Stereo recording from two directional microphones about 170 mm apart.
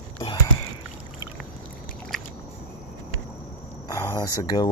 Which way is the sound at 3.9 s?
25° left (ahead or behind).